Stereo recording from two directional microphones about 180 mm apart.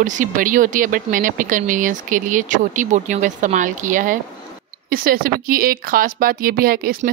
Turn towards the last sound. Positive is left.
turn(degrees=-55)  # may be behind; listen again after turning